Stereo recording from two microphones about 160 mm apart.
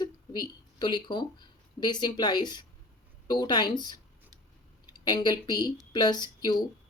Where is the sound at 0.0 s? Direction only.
25° left (ahead or behind).